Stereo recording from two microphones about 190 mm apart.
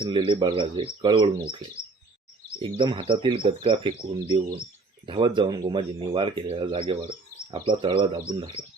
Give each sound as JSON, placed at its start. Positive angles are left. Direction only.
{"t": 0.0, "sound": "speech", "side_deg": -25}